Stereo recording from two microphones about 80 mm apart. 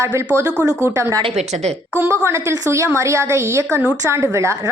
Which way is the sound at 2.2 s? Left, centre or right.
Right.